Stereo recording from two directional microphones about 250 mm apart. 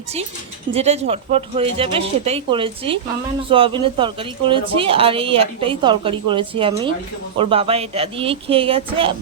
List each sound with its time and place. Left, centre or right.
0.7 s a woman's voice: right